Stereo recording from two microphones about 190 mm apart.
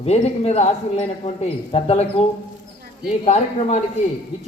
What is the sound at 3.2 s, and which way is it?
Speech, 35° left (ahead or behind).